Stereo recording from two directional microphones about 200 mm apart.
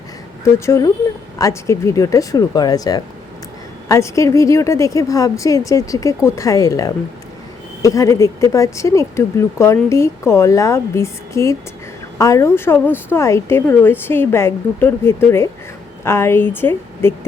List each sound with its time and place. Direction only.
0.4 s speech: 15° left (ahead or behind)